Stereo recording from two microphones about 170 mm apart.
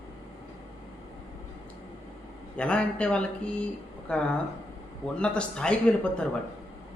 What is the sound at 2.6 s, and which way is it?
A man's voice, 5° left (ahead or behind).